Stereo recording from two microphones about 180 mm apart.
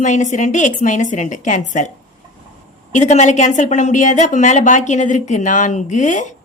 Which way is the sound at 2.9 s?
40° left (ahead or behind).